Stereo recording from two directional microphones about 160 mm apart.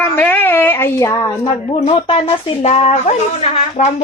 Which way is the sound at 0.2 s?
10° left (ahead or behind).